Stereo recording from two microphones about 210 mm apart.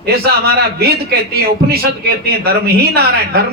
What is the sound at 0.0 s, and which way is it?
A man's voice, 50° right (ahead or behind).